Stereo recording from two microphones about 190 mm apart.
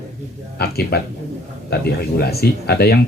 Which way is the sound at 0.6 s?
55° left (ahead or behind).